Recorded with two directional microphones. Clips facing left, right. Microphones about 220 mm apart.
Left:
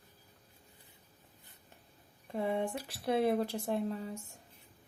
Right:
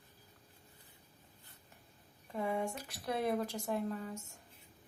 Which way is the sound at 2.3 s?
30° left (ahead or behind).